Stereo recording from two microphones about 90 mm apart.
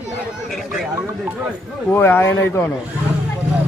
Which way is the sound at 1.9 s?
25° left (ahead or behind).